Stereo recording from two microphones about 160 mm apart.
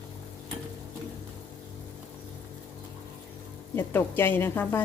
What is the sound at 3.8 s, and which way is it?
A woman's voice, 15° left (ahead or behind).